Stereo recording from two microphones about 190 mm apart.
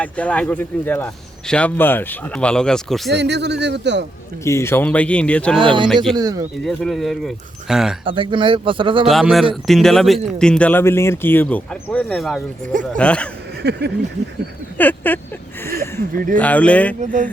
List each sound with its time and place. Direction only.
0.0 s a man's voice: 5° left (ahead or behind)
3.1 s speech: 65° right (ahead or behind)
4.4 s a man's voice: 15° left (ahead or behind)
5.5 s speech: 25° right (ahead or behind)
6.7 s speech: centre (ahead or behind)
8.0 s speech: 25° right (ahead or behind)
9.0 s speech: centre (ahead or behind)
13.6 s speech: 60° right (ahead or behind)
14.8 s a man's voice: 10° left (ahead or behind)
15.6 s a sound: 15° left (ahead or behind)
16.1 s speech: 45° right (ahead or behind)
16.4 s a man's voice: 5° left (ahead or behind)
17.0 s speech: 40° right (ahead or behind)